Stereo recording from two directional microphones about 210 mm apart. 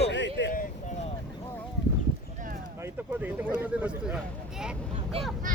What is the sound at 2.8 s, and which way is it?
Speech, 10° right (ahead or behind).